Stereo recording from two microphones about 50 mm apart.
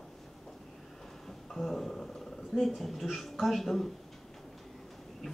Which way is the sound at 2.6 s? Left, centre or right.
Centre.